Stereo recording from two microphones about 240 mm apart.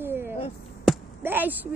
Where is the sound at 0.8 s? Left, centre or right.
Centre.